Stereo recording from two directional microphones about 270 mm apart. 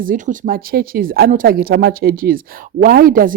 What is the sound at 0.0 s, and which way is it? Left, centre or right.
Speech, right.